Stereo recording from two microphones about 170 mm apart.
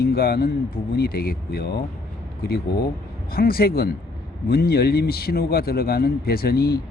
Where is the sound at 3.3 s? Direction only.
60° left (ahead or behind).